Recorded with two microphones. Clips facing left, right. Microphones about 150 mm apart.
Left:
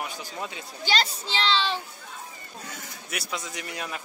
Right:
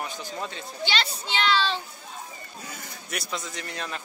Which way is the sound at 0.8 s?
35° left (ahead or behind).